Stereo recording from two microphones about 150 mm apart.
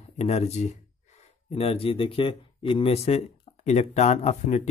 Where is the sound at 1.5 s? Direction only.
40° left (ahead or behind).